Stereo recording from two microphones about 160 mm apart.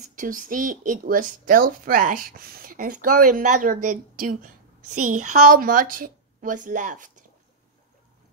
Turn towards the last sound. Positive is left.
turn(degrees=-50)  # may be behind; listen again after turning